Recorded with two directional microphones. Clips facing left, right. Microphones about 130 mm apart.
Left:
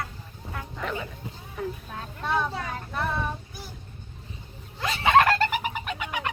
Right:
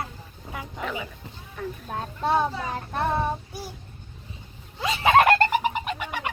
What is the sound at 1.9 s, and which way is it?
Children playing, 35° right (ahead or behind).